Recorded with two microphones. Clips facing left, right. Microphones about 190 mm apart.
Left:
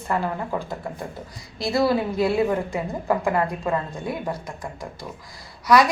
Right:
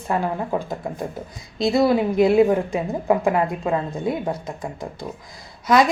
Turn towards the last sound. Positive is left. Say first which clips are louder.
# right 1 dB
turn(degrees=-25)  # may be behind; listen again after turning